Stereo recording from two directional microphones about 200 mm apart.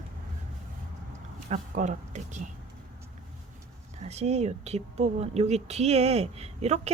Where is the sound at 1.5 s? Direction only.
40° right (ahead or behind).